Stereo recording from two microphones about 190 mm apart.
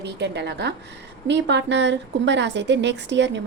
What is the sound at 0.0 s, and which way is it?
A woman's voice, 65° right (ahead or behind).